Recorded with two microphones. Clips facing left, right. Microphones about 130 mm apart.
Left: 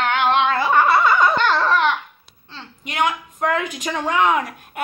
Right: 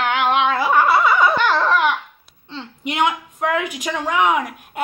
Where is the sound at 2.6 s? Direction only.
20° right (ahead or behind).